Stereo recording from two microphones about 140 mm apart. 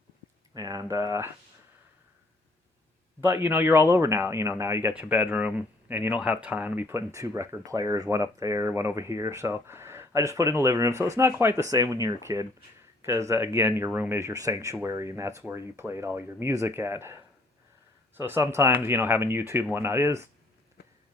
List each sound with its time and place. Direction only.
0.5 s speech: 25° right (ahead or behind)
3.2 s speech: 15° right (ahead or behind)
18.2 s speech: 20° right (ahead or behind)